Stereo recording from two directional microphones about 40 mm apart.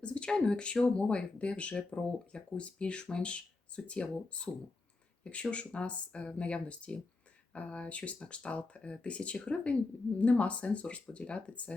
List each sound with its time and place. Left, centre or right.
0.0 s speech: left